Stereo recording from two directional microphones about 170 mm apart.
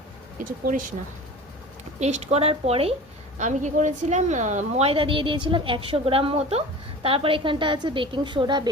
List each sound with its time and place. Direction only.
0.4 s speech: 55° right (ahead or behind)
2.0 s a woman's voice: 40° right (ahead or behind)
3.3 s a woman's voice: 45° right (ahead or behind); by 8.7 s 25° right (ahead or behind)